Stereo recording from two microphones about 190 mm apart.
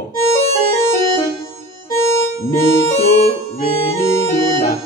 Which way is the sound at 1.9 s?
15° left (ahead or behind).